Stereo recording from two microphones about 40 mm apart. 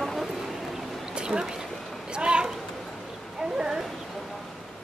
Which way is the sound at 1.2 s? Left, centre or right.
Right.